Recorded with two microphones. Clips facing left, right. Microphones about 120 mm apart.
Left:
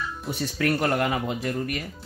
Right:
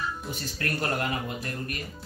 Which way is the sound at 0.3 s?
85° left.